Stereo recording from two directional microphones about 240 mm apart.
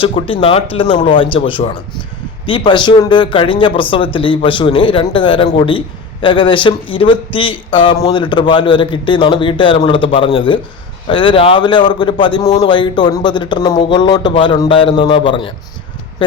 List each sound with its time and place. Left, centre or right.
0.0 s speech: left